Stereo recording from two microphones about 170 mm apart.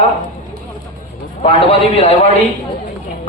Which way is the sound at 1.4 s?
35° left (ahead or behind).